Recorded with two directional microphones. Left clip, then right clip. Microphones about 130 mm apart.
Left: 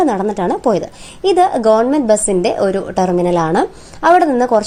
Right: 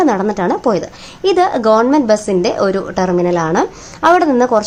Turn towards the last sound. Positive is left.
turn(degrees=15)  # may be behind; listen again after turning